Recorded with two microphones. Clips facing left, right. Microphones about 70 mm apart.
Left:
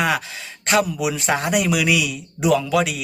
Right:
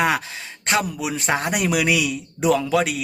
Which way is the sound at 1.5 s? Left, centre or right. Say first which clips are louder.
Left 2 dB; right.